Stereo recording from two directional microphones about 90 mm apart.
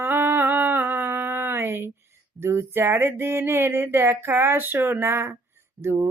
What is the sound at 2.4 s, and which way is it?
Speech, 25° right (ahead or behind).